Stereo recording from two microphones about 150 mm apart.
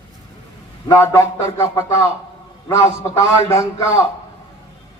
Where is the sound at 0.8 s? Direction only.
20° left (ahead or behind).